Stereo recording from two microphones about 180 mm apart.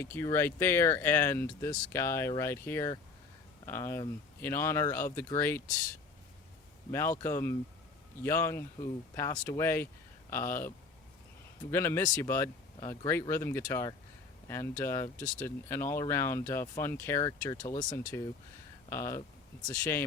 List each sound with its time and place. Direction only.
0.0 s speech: 15° left (ahead or behind)
6.9 s speech: 15° left (ahead or behind)
11.7 s speech: 15° left (ahead or behind)